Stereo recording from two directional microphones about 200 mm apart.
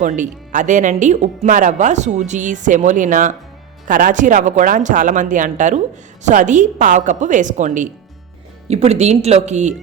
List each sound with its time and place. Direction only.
0.0 s speech: 40° right (ahead or behind)